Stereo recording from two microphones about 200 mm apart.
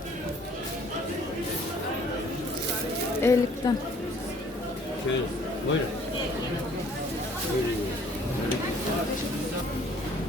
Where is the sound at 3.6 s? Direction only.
20° left (ahead or behind).